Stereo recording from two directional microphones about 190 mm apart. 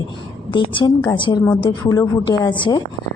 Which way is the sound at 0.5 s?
25° left (ahead or behind).